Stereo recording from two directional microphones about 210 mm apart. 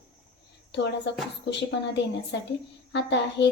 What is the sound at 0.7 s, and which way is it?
A woman's voice, 55° left (ahead or behind).